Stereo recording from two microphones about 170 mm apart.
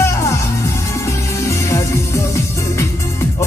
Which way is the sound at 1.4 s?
15° left (ahead or behind).